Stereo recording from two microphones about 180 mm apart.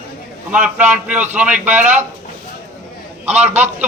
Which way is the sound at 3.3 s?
40° right (ahead or behind).